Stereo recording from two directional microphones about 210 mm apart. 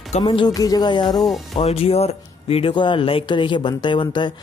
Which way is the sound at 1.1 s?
Centre (ahead or behind).